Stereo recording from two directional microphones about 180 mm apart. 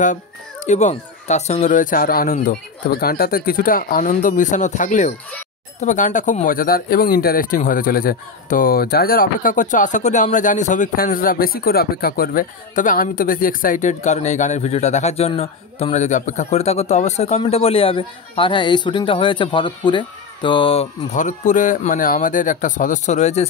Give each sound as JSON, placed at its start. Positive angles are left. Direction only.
{"t": 0.7, "sound": "a man's voice", "side_deg": 40}